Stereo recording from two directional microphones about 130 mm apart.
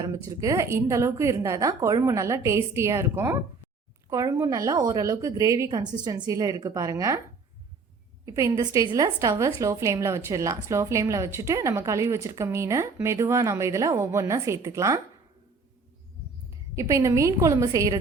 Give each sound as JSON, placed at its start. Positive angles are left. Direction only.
{"t": 0.3, "sound": "a woman's voice", "side_deg": -25}
{"t": 8.2, "sound": "a woman's voice", "side_deg": -20}
{"t": 16.7, "sound": "a woman's voice", "side_deg": -25}